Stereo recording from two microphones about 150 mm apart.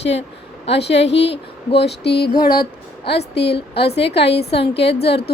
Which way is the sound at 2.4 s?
80° left.